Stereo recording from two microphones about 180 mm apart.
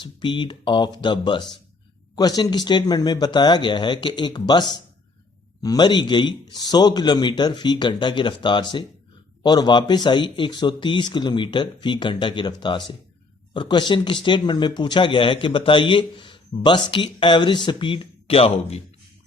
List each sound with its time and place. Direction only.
0.0 s speech: 25° left (ahead or behind)